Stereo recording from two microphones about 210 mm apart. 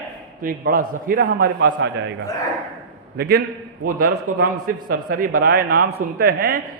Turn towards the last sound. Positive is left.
turn(degrees=-50)  # may be behind; listen again after turning